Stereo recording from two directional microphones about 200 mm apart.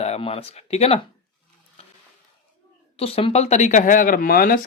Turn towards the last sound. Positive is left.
turn(degrees=45)  # may be behind; listen again after turning